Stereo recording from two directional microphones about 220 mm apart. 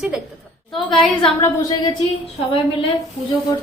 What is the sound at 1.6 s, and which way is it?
Speech, 15° left (ahead or behind).